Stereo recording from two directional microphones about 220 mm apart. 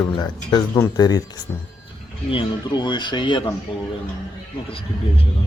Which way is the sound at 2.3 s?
20° left (ahead or behind).